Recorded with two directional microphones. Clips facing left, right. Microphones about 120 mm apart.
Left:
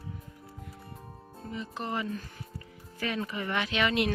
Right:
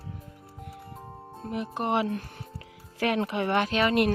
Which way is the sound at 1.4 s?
65° right (ahead or behind).